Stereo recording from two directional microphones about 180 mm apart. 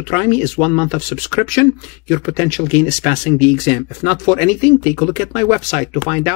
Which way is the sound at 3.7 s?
40° left (ahead or behind).